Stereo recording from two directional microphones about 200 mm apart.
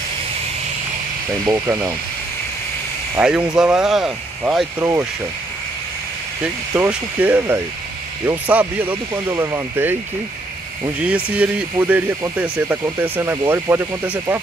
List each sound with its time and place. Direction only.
1.4 s speech: 20° right (ahead or behind)
3.2 s speech: 5° right (ahead or behind)
6.4 s speech: 10° right (ahead or behind)
11.0 s speech: 5° right (ahead or behind)